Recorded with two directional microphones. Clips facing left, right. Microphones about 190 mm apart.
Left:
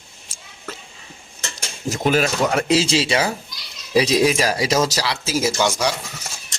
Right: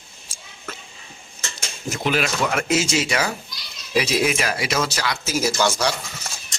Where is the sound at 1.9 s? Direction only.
40° left (ahead or behind).